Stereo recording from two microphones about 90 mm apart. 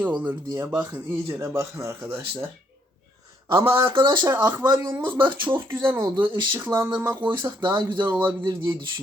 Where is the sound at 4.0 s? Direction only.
55° right (ahead or behind).